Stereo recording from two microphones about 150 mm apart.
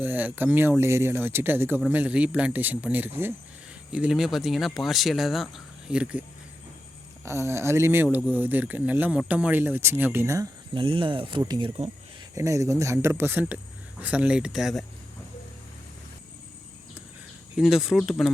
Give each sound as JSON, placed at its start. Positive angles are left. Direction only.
{"t": 0.0, "sound": "speech", "side_deg": -10}
{"t": 7.3, "sound": "speech", "side_deg": -20}
{"t": 10.8, "sound": "speech", "side_deg": -35}
{"t": 17.6, "sound": "speech", "side_deg": -5}